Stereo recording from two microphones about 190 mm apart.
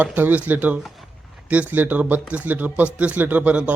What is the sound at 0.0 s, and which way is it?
A man's voice, 10° right (ahead or behind).